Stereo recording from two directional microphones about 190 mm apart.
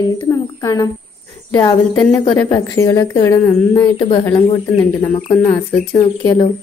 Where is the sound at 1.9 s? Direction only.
5° left (ahead or behind).